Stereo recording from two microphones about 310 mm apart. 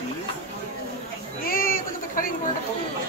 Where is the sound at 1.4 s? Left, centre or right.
Left.